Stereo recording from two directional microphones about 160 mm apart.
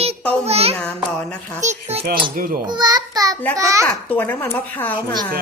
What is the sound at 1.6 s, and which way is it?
Speech, 45° right (ahead or behind).